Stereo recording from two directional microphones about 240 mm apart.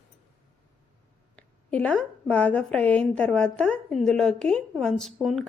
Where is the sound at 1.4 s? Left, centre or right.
Centre.